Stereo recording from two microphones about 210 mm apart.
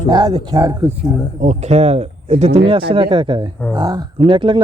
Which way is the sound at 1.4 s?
30° right (ahead or behind).